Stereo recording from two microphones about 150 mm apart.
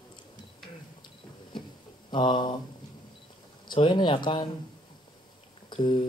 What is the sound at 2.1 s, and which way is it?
Speech, 30° left (ahead or behind).